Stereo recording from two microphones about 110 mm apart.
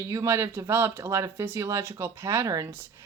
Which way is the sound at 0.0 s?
25° right (ahead or behind).